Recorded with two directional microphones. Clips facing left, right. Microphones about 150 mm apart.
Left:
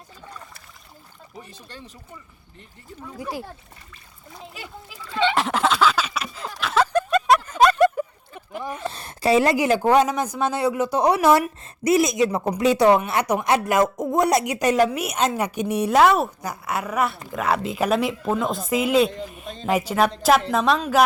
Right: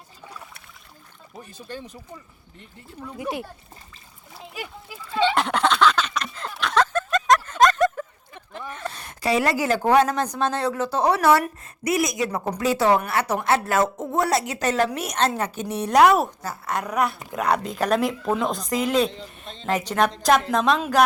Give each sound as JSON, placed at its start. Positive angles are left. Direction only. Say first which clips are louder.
{"t": 0.3, "sound": "trickle", "louder": "even", "side_deg": -5}
{"t": 3.2, "sound": "speech", "louder": "right 2 dB", "side_deg": -20}
{"t": 5.1, "sound": "fowl", "louder": "even", "side_deg": 0}
{"t": 6.9, "sound": "a sound", "louder": "left 2 dB", "side_deg": 10}
{"t": 8.9, "sound": "a woman's voice", "louder": "left 4 dB", "side_deg": 30}
{"t": 16.0, "sound": "a woman's voice", "louder": "right 1 dB", "side_deg": 0}
{"t": 16.4, "sound": "a woman's voice", "louder": "left 1 dB", "side_deg": 10}